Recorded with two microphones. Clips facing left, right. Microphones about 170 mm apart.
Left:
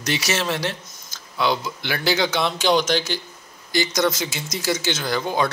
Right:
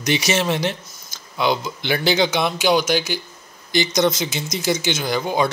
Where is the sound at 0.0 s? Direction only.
15° right (ahead or behind).